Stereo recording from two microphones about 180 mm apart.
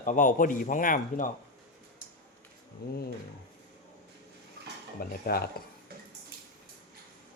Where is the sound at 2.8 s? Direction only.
55° left (ahead or behind).